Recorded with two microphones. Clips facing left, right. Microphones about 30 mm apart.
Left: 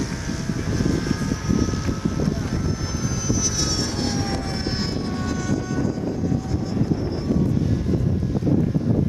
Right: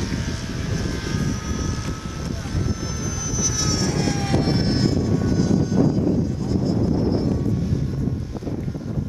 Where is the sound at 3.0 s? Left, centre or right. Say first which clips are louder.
Left 4 dB; centre.